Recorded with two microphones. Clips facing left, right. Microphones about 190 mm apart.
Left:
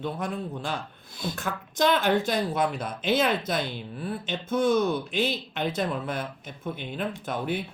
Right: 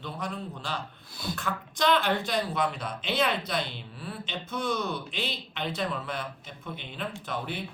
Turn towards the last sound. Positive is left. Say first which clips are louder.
# left 5 dB
turn(degrees=50)  # may be behind; listen again after turning